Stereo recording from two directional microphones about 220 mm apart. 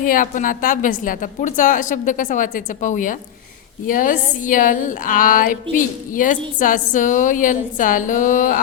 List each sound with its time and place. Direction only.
0.0 s a woman's voice: 40° left (ahead or behind)